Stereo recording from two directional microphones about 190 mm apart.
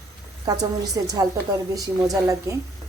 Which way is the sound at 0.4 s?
20° right (ahead or behind).